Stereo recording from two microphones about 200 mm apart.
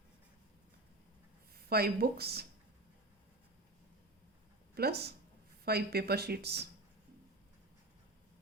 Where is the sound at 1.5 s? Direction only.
50° right (ahead or behind).